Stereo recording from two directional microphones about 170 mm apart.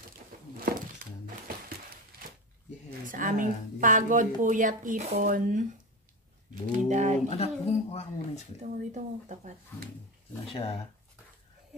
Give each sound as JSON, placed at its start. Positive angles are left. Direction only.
{"t": 3.1, "sound": "speech", "side_deg": -50}
{"t": 7.2, "sound": "a man's voice", "side_deg": 40}
{"t": 8.5, "sound": "speech", "side_deg": -45}
{"t": 10.4, "sound": "a man's voice", "side_deg": 35}